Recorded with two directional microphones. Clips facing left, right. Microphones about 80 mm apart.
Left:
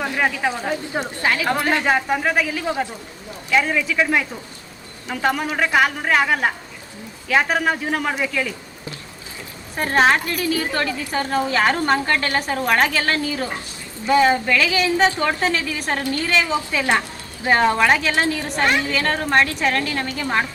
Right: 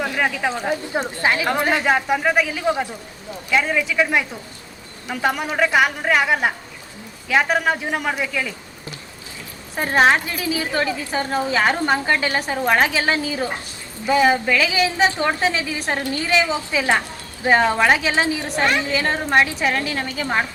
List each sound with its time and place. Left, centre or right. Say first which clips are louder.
0.7 s a woman's voice: right 1 dB; centre
1.8 s a woman's voice: right 1 dB; centre
2.2 s a woman's voice: right 2 dB; centre
3.5 s a woman's voice: even; centre
9.7 s a woman's voice: right 1 dB; centre